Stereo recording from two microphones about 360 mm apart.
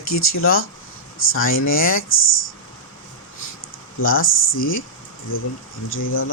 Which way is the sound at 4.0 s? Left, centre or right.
Left.